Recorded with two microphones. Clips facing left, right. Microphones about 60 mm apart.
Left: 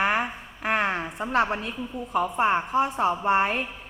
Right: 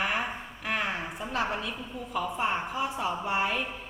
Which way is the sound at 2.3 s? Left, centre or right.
Left.